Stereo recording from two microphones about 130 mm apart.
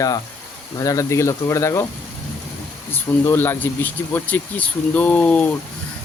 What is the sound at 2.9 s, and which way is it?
Speech, 15° left (ahead or behind).